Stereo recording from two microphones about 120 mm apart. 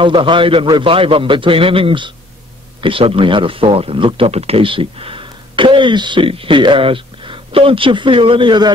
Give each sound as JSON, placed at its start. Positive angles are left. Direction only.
{"t": 0.0, "sound": "speech", "side_deg": -45}